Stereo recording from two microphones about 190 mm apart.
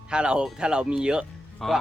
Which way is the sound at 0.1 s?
5° right (ahead or behind).